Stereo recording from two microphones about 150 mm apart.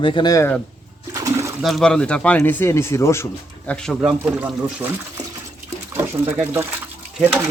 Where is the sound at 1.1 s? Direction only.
20° right (ahead or behind).